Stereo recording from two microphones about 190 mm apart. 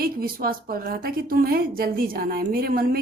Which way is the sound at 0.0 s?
50° right (ahead or behind).